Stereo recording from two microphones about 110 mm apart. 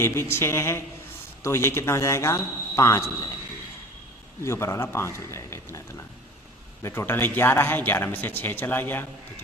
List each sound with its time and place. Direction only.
0.0 s speech: 25° left (ahead or behind)
4.4 s speech: 25° left (ahead or behind)
6.8 s speech: 20° left (ahead or behind)